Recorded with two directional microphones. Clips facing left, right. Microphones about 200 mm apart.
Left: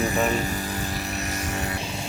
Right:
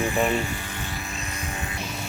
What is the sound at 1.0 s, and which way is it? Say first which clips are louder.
Vehicle: left 5 dB; 75° left (ahead or behind).